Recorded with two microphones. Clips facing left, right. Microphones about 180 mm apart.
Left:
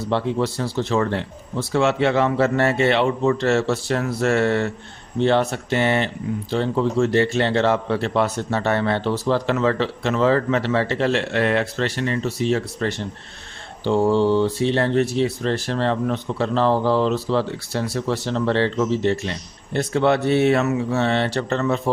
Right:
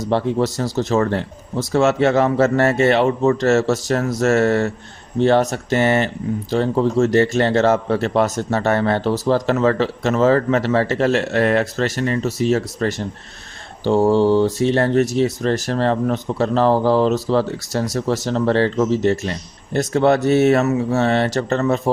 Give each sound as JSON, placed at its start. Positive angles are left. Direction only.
{"t": 0.0, "sound": "a man's voice", "side_deg": -40}